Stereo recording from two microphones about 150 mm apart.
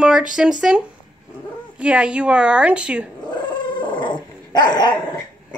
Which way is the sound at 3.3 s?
30° left (ahead or behind).